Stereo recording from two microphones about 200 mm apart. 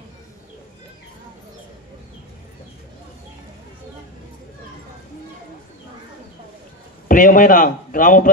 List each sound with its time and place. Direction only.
7.1 s a man's voice: 45° left (ahead or behind)